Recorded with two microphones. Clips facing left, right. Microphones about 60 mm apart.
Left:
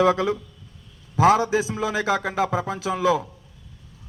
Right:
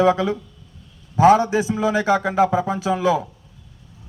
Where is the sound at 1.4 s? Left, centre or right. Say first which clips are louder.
Right 2 dB; centre.